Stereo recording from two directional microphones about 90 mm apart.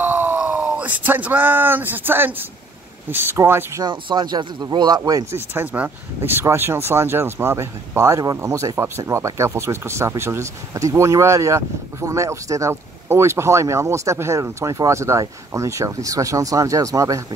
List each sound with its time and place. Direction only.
0.0 s a sound: 20° right (ahead or behind)
3.1 s speech: 25° right (ahead or behind)
3.8 s speech: 50° right (ahead or behind)
5.3 s speech: 25° right (ahead or behind)